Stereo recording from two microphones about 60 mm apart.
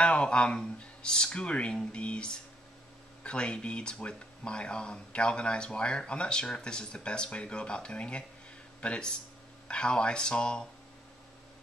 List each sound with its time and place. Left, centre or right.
0.0 s speech: centre